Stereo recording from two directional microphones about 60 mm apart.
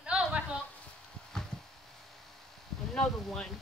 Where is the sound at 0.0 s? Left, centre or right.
Centre.